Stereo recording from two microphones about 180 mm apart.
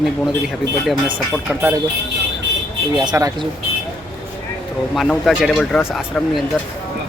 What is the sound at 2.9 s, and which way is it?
Speech, 20° right (ahead or behind).